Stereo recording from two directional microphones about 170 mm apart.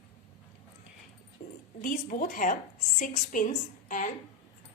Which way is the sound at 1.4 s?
55° left (ahead or behind).